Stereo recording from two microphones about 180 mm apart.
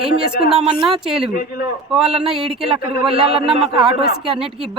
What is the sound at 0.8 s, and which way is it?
Speech, centre (ahead or behind).